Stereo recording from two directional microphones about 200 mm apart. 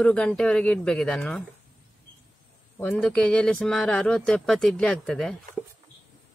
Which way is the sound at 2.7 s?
5° left (ahead or behind).